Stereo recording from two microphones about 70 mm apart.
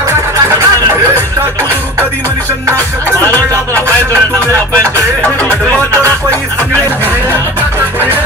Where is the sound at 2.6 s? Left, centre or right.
Right.